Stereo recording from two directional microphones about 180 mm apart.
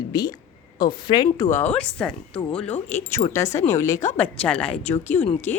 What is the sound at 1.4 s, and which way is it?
Speech, 10° left (ahead or behind).